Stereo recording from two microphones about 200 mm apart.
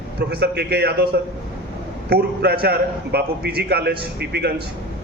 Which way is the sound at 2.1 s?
50° right (ahead or behind).